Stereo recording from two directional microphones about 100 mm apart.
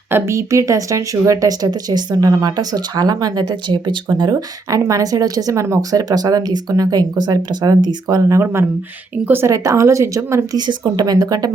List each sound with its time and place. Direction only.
0.1 s speech: 30° right (ahead or behind); by 3.9 s 50° right (ahead or behind)
4.2 s speech: 40° right (ahead or behind)
8.2 s speech: 30° right (ahead or behind)
9.5 s speech: 30° right (ahead or behind)